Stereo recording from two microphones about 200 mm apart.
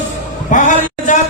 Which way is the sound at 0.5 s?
40° left (ahead or behind).